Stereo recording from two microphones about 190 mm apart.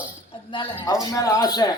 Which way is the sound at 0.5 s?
25° left (ahead or behind).